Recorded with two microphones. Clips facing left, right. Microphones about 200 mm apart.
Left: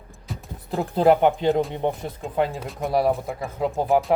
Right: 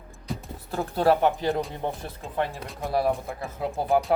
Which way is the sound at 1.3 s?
Centre (ahead or behind).